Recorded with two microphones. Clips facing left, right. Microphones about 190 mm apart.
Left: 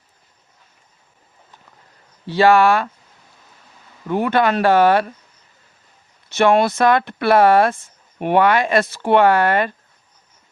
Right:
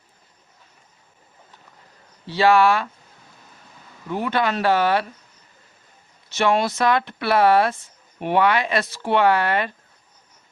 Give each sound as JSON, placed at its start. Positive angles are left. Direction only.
{"t": 2.3, "sound": "speech", "side_deg": 50}
{"t": 4.1, "sound": "speech", "side_deg": 55}
{"t": 6.3, "sound": "speech", "side_deg": 55}